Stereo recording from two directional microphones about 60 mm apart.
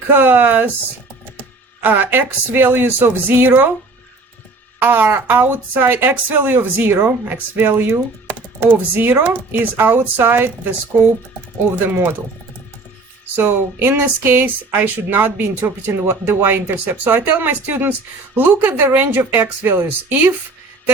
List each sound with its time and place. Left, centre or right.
0.1 s speech: right
1.8 s speech: right
4.8 s speech: right
11.9 s speech: right
13.3 s speech: right